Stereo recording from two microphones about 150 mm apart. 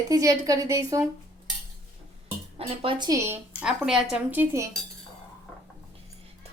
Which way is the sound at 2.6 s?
35° right (ahead or behind).